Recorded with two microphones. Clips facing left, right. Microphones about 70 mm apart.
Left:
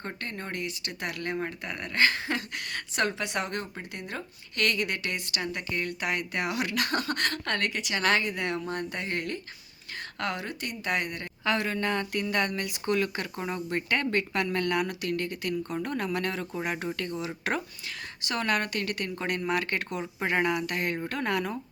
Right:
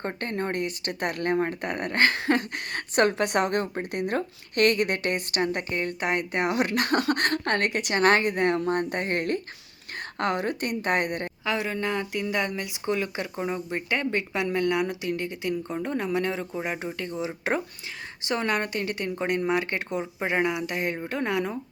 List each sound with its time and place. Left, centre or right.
0.0 s speech: right
11.4 s a woman's voice: centre